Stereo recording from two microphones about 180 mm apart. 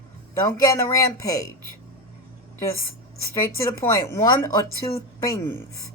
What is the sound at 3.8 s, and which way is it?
Speech, 15° left (ahead or behind).